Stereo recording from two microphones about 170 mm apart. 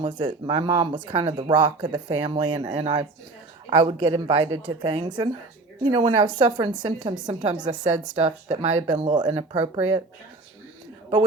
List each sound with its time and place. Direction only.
0.0 s speech: 25° right (ahead or behind)